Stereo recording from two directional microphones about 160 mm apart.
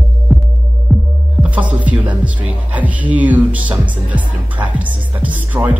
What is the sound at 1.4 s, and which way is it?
Music, 10° right (ahead or behind).